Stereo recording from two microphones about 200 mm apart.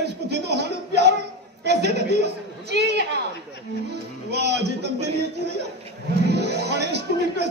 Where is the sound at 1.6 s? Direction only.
55° right (ahead or behind).